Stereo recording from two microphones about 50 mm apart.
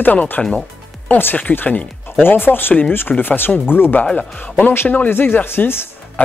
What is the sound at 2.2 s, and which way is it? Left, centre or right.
Speech, left.